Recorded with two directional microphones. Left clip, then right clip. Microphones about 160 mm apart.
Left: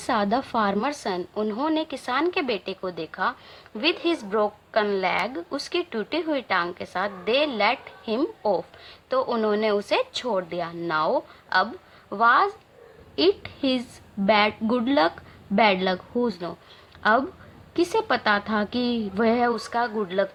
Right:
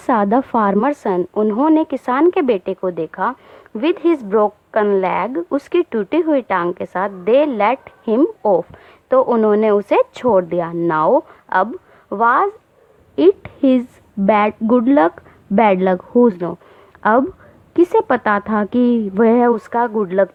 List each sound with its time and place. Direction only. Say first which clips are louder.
0.0 s a woman's voice: right 8 dB; 35° right (ahead or behind)